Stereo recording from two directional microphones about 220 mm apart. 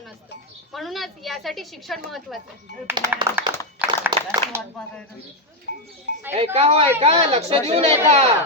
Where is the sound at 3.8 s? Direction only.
10° right (ahead or behind).